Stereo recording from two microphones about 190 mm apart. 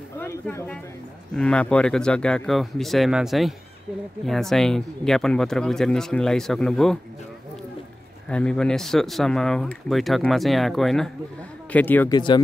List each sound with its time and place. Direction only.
0.2 s speech: 15° left (ahead or behind)
8.3 s speech: 5° left (ahead or behind)
12.1 s speech: 25° left (ahead or behind)